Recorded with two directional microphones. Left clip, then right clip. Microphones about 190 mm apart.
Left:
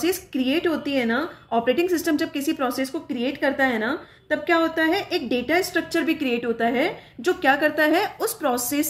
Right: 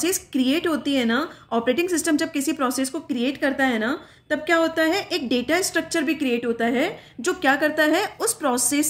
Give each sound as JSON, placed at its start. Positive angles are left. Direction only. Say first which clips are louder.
{"t": 0.0, "sound": "speech", "louder": "right 1 dB", "side_deg": -20}